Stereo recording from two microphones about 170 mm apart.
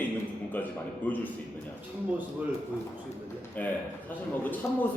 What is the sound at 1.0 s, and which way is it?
Speech, 10° left (ahead or behind).